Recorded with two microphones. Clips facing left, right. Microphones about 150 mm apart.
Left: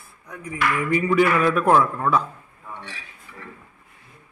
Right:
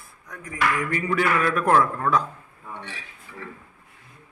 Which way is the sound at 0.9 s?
10° left (ahead or behind).